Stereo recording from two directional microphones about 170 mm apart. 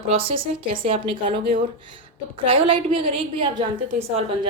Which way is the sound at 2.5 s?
30° right (ahead or behind).